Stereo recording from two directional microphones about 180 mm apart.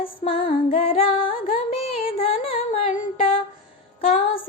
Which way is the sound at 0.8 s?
30° left (ahead or behind).